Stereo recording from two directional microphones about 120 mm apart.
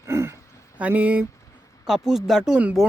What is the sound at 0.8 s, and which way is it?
Speech, 10° right (ahead or behind).